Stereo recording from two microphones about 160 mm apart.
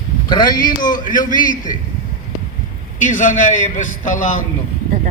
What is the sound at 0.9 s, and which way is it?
Speech, 55° left (ahead or behind).